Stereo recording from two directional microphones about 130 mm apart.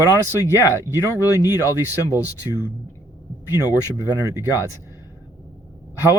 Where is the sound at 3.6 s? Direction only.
30° left (ahead or behind).